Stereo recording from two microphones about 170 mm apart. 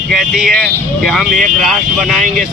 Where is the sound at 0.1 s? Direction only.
Centre (ahead or behind).